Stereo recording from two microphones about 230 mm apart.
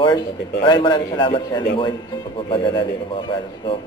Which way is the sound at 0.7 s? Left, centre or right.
Centre.